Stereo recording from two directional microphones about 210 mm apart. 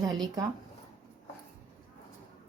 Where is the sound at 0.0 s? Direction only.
20° right (ahead or behind).